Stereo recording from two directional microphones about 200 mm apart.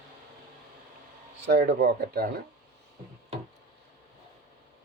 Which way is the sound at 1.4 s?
55° right (ahead or behind).